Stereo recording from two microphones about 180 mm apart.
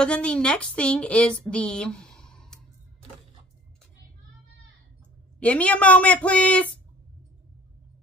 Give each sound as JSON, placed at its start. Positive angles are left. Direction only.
{"t": 0.0, "sound": "a woman's voice", "side_deg": 5}
{"t": 1.4, "sound": "a sound", "side_deg": 5}
{"t": 5.4, "sound": "speech", "side_deg": 5}